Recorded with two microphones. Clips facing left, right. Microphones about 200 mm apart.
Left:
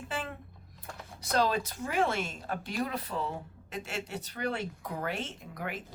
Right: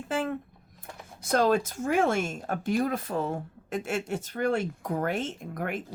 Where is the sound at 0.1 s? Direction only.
45° right (ahead or behind).